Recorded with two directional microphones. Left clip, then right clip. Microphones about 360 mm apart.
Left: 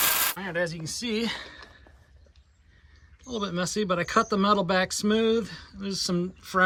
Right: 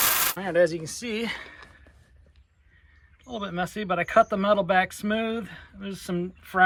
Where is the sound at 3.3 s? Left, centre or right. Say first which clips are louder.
Left 1 dB; centre.